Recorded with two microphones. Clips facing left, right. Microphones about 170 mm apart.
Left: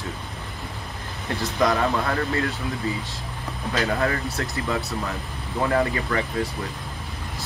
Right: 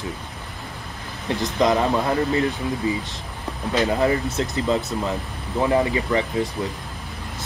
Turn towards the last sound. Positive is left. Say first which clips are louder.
# right 3 dB
turn(degrees=-20)  # may be behind; listen again after turning